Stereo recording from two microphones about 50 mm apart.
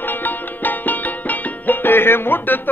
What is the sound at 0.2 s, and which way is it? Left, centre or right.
Music, left.